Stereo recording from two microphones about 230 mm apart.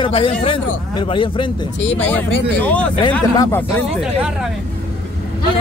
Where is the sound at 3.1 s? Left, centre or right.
Centre.